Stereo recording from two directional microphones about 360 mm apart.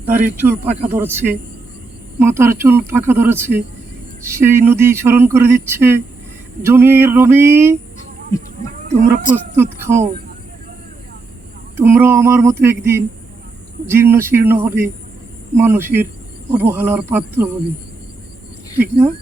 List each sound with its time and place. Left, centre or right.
0.0 s speech: right
0.9 s speech: centre
9.3 s speech: centre
11.8 s speech: centre